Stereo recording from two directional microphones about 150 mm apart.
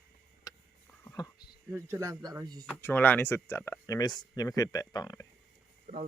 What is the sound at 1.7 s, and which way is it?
Speech, 20° right (ahead or behind).